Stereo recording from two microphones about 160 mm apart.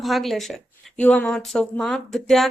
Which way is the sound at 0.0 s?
Centre (ahead or behind).